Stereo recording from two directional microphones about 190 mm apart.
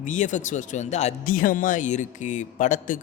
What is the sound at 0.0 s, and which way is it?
Speech, 40° left (ahead or behind).